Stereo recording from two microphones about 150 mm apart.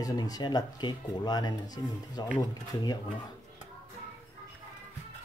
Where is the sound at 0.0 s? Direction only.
25° left (ahead or behind).